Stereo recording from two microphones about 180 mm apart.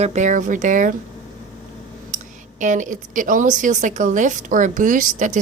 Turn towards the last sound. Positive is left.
turn(degrees=-45)  # may be behind; listen again after turning